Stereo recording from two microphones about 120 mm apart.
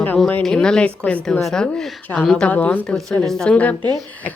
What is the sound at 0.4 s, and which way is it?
A woman's voice, 5° left (ahead or behind).